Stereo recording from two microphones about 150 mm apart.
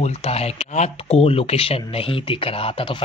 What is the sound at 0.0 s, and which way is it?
Speech, 45° left (ahead or behind).